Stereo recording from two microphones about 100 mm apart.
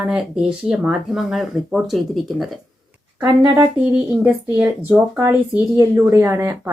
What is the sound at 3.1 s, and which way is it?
Speech, 50° right (ahead or behind).